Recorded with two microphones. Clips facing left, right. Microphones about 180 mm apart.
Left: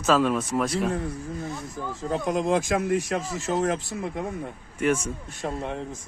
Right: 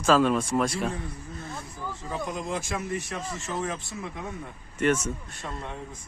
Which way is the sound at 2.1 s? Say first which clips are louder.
Left 8 dB; 90° left.